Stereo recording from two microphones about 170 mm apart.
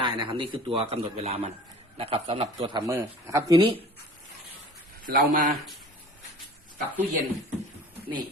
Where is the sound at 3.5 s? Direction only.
30° right (ahead or behind).